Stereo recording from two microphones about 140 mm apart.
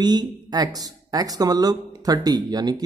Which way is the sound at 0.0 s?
30° right (ahead or behind).